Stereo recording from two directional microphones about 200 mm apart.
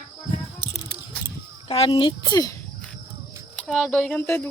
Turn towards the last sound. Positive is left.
turn(degrees=10)  # may be behind; listen again after turning